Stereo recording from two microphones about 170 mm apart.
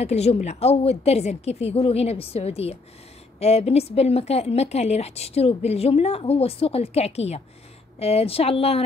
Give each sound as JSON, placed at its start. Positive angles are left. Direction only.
{"t": 0.0, "sound": "a woman's voice", "side_deg": 40}